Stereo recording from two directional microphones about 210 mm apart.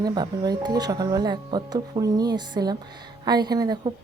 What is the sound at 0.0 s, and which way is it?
Speech, 20° right (ahead or behind).